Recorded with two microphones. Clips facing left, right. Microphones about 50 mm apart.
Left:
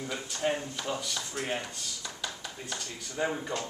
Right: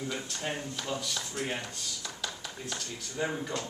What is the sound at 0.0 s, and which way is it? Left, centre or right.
Speech, centre.